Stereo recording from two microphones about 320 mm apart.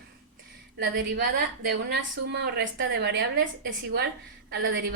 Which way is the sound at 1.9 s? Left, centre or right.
Right.